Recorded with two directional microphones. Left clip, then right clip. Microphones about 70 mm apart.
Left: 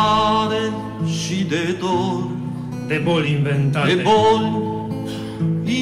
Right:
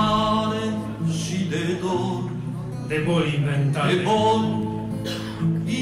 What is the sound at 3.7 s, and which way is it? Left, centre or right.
Music, left.